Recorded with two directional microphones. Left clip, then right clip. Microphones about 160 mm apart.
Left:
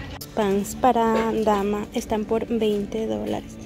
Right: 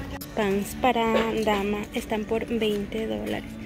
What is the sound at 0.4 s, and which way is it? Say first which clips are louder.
A woman's voice: left 3 dB; 20° left (ahead or behind).